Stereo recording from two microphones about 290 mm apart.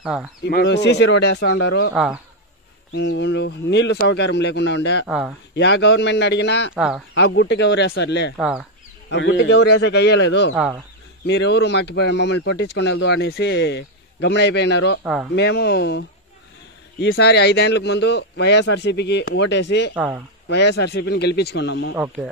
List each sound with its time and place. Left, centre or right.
0.0 s a man's voice: centre
0.4 s speech: left
2.9 s speech: left
5.0 s a man's voice: centre
5.5 s speech: left
6.7 s a man's voice: centre
7.2 s speech: left
8.4 s a man's voice: centre
9.1 s speech: left
10.5 s a man's voice: centre
11.2 s speech: left
20.0 s a man's voice: centre
20.4 s speech: left
21.9 s a man's voice: centre